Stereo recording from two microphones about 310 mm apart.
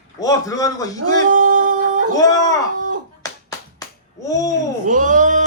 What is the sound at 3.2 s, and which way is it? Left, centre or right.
Music, centre.